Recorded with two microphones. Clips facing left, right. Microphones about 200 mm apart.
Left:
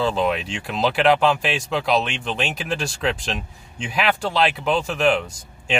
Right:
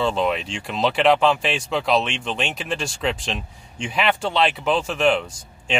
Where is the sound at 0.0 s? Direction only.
Centre (ahead or behind).